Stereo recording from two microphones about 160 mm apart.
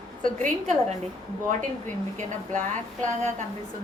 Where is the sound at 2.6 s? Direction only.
50° right (ahead or behind).